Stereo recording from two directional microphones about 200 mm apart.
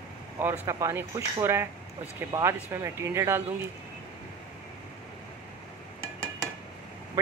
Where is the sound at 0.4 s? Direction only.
15° right (ahead or behind).